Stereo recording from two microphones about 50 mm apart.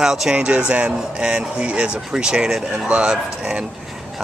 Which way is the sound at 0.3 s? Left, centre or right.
Right.